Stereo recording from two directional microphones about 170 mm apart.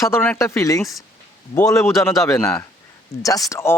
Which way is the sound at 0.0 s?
15° left (ahead or behind).